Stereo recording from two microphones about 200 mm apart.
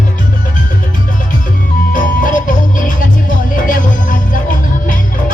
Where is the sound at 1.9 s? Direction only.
40° left (ahead or behind).